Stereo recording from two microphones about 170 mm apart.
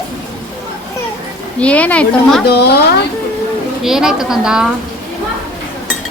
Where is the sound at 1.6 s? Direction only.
10° left (ahead or behind).